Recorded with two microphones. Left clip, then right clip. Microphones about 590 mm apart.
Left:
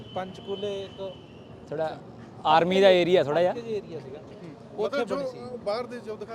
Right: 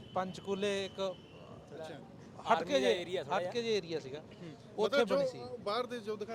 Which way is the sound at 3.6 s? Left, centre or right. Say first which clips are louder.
Left 1 dB; right.